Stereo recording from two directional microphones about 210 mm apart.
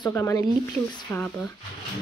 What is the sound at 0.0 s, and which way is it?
Speech, 15° left (ahead or behind).